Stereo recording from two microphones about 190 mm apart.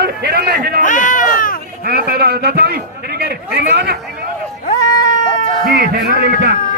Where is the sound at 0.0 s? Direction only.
55° right (ahead or behind).